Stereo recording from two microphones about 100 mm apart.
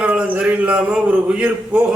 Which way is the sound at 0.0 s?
15° right (ahead or behind).